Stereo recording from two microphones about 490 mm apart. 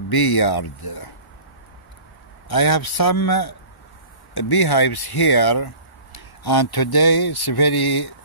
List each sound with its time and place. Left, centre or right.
0.1 s speech: left
2.5 s speech: left